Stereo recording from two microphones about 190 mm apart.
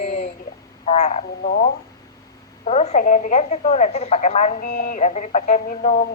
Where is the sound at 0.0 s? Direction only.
35° left (ahead or behind).